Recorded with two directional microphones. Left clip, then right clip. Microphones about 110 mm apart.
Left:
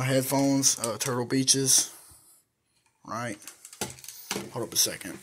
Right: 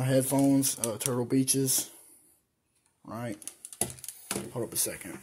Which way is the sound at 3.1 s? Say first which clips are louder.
Left 5 dB; 15° right (ahead or behind).